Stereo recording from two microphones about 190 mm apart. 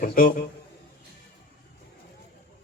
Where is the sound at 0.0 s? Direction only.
45° left (ahead or behind).